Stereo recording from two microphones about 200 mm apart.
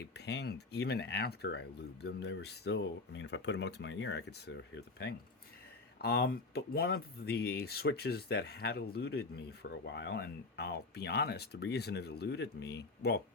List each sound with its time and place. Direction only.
0.1 s speech: 55° left (ahead or behind)